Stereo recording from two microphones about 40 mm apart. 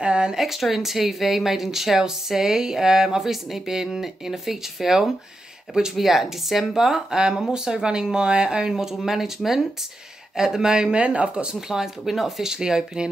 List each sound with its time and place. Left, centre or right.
0.0 s a sound: right
0.4 s speech: centre
11.0 s speech: right
11.7 s speech: centre